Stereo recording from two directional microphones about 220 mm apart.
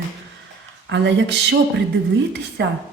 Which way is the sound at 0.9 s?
50° right (ahead or behind).